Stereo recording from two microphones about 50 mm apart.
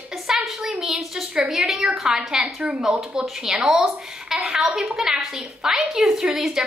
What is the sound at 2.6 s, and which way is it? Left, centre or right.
Speech, right.